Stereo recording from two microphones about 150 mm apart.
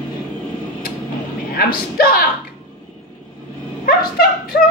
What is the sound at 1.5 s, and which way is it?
Speech, 85° left.